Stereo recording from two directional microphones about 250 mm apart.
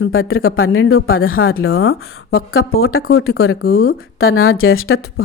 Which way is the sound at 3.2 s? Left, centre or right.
Left.